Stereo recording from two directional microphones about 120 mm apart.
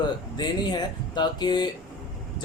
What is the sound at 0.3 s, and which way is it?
A man's voice, 35° left (ahead or behind).